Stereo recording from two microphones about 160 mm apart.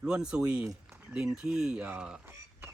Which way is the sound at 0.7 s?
15° right (ahead or behind).